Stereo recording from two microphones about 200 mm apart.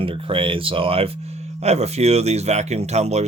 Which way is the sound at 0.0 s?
25° right (ahead or behind).